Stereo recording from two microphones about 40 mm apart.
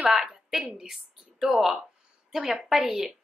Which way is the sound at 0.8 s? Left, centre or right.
Centre.